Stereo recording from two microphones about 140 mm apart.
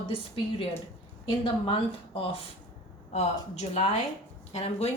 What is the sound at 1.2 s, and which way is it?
Speech, 35° left (ahead or behind).